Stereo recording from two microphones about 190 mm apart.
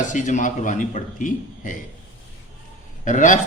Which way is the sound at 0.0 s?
40° left (ahead or behind).